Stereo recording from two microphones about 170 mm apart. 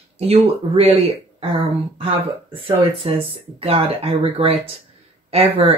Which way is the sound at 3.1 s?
35° right (ahead or behind).